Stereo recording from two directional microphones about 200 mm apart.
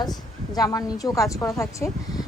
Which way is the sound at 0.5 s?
20° left (ahead or behind).